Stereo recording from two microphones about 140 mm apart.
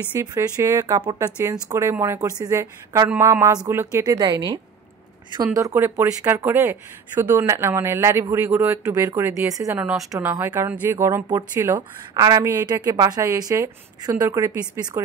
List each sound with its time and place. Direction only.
0.2 s a woman's voice: 25° right (ahead or behind)
9.8 s a woman's voice: 10° right (ahead or behind); by 15.0 s 30° right (ahead or behind)